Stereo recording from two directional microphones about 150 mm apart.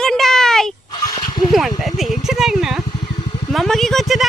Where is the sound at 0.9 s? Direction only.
25° left (ahead or behind).